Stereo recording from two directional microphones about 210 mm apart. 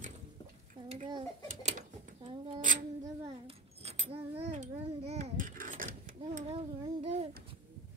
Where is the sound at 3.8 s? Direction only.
30° right (ahead or behind).